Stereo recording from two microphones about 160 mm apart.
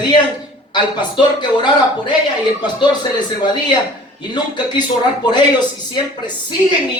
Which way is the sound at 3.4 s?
30° left (ahead or behind).